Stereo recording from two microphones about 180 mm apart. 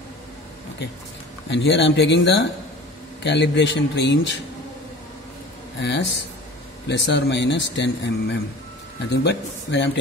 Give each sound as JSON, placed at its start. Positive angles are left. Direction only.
{"t": 1.5, "sound": "speech", "side_deg": 85}
{"t": 5.8, "sound": "speech", "side_deg": 75}
{"t": 9.1, "sound": "speech", "side_deg": 70}